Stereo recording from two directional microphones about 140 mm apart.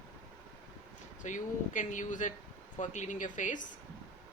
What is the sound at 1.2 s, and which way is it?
Speech, 65° left (ahead or behind).